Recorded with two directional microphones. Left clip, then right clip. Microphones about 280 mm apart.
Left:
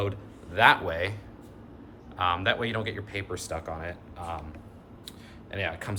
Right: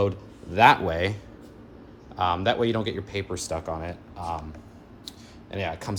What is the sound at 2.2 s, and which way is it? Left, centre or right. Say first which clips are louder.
Speech: right 3 dB; centre.